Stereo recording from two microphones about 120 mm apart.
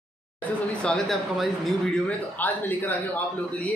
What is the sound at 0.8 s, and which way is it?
Speech, centre (ahead or behind).